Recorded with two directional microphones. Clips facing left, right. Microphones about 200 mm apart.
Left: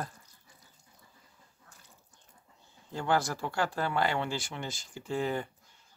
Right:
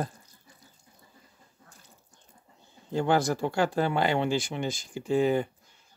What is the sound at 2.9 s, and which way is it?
Speech, 20° right (ahead or behind).